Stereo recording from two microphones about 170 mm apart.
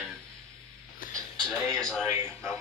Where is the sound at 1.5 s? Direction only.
5° left (ahead or behind).